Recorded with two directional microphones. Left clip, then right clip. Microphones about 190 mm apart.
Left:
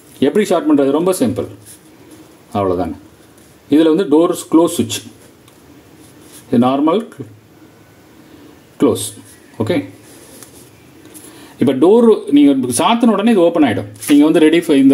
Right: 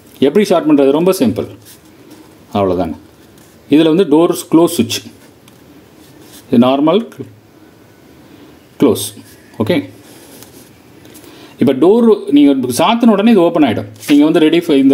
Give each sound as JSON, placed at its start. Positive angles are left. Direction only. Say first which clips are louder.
{"t": 0.2, "sound": "speech", "louder": "right 3 dB", "side_deg": -20}
{"t": 2.5, "sound": "speech", "louder": "right 2 dB", "side_deg": -20}
{"t": 6.5, "sound": "speech", "louder": "right 3 dB", "side_deg": -25}
{"t": 8.7, "sound": "a man's voice", "louder": "right 2 dB", "side_deg": -25}
{"t": 11.5, "sound": "speech", "louder": "right 1 dB", "side_deg": -20}